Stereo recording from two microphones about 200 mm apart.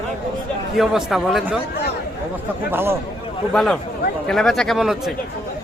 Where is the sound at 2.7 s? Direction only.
10° right (ahead or behind).